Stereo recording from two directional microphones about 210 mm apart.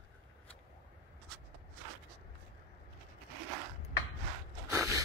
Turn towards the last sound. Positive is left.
turn(degrees=-15)  # may be behind; listen again after turning